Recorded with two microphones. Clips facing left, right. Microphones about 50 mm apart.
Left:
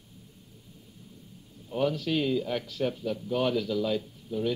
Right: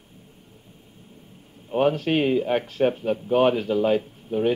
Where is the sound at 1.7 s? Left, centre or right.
Right.